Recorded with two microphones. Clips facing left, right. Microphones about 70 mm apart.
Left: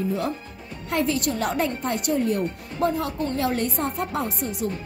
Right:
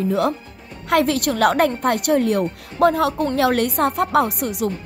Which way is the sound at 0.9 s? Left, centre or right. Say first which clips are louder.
Right 6 dB; right.